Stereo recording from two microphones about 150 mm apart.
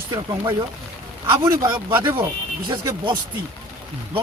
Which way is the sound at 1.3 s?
20° right (ahead or behind).